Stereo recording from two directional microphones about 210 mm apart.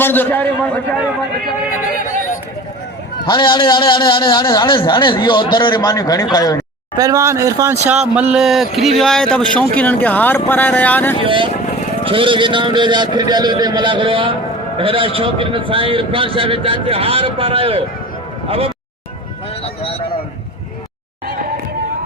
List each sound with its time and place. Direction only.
0.0 s a man's voice: 10° left (ahead or behind)
2.0 s a sound: 40° left (ahead or behind)
3.2 s a man's voice: 20° left (ahead or behind)
6.9 s a man's voice: 15° right (ahead or behind); by 11.2 s 10° left (ahead or behind)
12.0 s a man's voice: 25° right (ahead or behind)
19.6 s a sound: 25° left (ahead or behind)